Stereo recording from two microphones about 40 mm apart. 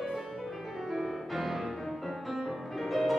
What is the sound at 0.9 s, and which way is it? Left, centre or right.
Music, centre.